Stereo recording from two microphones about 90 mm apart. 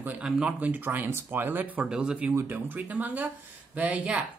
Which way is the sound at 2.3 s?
30° right (ahead or behind).